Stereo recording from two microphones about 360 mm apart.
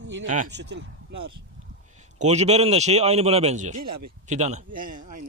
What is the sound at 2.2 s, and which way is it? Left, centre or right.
A man's voice, centre.